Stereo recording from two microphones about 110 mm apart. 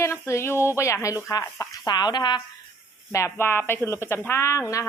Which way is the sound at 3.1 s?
25° left (ahead or behind).